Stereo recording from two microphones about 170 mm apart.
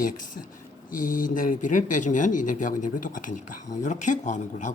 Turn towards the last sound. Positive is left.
turn(degrees=45)  # may be behind; listen again after turning